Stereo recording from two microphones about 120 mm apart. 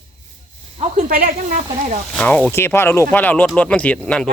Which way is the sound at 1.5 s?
90° right.